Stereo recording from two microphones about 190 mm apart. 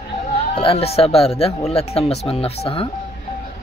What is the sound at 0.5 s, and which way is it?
Speech, 30° left (ahead or behind).